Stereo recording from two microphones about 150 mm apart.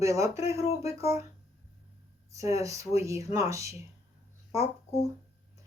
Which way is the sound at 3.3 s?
20° right (ahead or behind).